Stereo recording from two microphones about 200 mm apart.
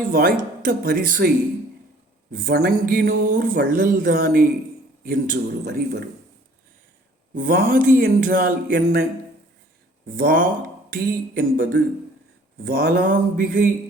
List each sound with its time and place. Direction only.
0.1 s speech: 45° right (ahead or behind)
2.5 s speech: 45° right (ahead or behind)
7.3 s speech: 45° right (ahead or behind)
8.7 s speech: 55° right (ahead or behind)
10.2 s speech: 45° right (ahead or behind)